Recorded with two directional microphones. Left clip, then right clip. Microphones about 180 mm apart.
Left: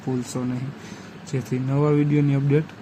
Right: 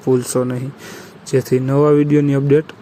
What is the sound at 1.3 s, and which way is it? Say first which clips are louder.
Speech: right 12 dB; 25° right (ahead or behind).